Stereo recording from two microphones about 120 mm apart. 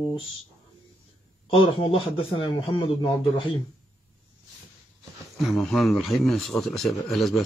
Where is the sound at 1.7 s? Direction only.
45° left (ahead or behind).